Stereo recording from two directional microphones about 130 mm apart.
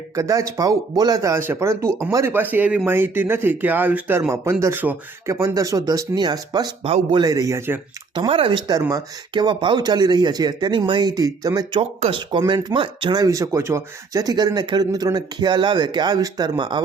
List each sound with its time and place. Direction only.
0.2 s speech: 25° right (ahead or behind)
5.3 s speech: 25° right (ahead or behind)
6.8 s a man's voice: 45° right (ahead or behind)
7.2 s speech: 25° right (ahead or behind)
8.1 s speech: 40° right (ahead or behind)
11.8 s speech: 55° right (ahead or behind)
12.4 s speech: 25° right (ahead or behind)
12.7 s speech: 40° right (ahead or behind)